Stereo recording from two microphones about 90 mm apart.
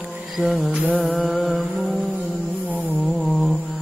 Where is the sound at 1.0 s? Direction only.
Centre (ahead or behind).